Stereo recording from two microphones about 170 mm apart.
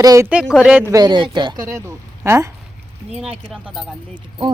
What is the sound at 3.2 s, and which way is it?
Speech, 5° right (ahead or behind).